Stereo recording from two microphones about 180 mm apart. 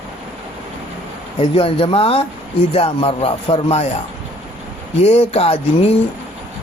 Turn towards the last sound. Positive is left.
turn(degrees=35)  # may be behind; listen again after turning